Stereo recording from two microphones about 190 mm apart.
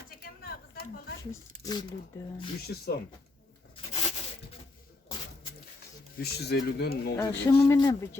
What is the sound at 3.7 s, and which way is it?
Rub, 30° left (ahead or behind).